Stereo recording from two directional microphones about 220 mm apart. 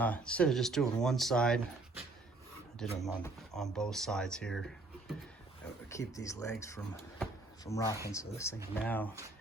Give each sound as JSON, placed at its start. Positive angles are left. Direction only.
{"t": 0.0, "sound": "speech", "side_deg": 5}
{"t": 2.7, "sound": "speech", "side_deg": 0}
{"t": 5.9, "sound": "speech", "side_deg": 15}